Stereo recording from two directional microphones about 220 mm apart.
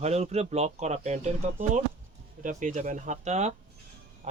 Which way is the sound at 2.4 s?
35° right (ahead or behind).